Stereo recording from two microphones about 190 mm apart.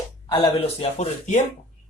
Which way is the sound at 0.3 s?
25° left (ahead or behind).